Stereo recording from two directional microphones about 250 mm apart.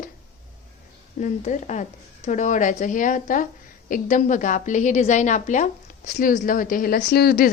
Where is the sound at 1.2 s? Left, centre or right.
Left.